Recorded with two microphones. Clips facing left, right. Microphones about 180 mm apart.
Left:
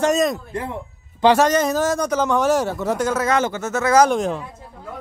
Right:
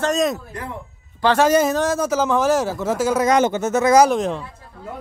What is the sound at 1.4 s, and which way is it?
A man's voice, 5° right (ahead or behind).